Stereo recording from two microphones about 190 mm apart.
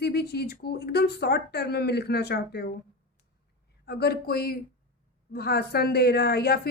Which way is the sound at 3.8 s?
55° left (ahead or behind).